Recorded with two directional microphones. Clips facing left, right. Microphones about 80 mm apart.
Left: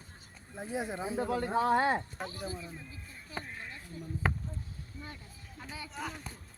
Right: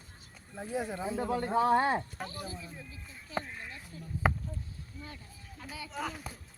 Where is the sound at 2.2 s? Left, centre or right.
Centre.